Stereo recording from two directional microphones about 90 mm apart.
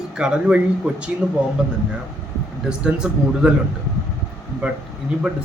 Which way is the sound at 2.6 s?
10° right (ahead or behind).